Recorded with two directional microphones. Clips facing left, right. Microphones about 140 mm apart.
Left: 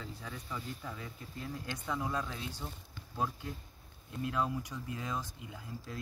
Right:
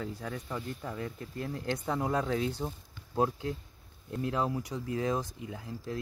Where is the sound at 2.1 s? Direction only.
75° right (ahead or behind).